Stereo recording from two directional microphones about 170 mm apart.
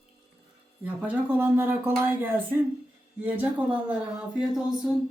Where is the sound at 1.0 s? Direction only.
10° right (ahead or behind).